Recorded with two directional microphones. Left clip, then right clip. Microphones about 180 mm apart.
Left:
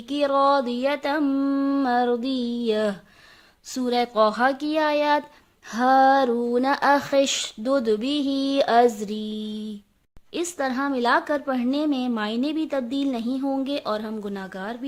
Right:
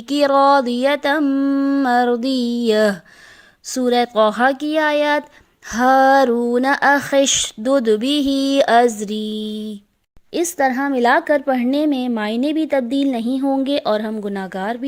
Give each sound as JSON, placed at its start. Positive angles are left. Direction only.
{"t": 0.1, "sound": "speech", "side_deg": -25}